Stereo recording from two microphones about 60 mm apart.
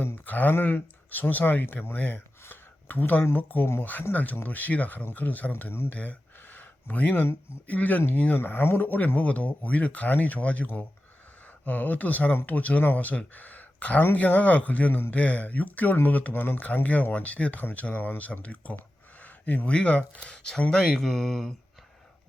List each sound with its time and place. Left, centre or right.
0.3 s speech: left; by 21.5 s centre